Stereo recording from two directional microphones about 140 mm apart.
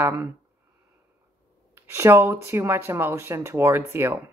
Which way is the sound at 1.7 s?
20° right (ahead or behind).